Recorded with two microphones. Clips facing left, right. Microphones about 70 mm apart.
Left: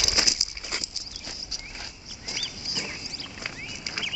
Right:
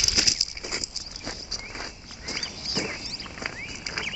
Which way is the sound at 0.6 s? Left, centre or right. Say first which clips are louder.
Right 1 dB; centre.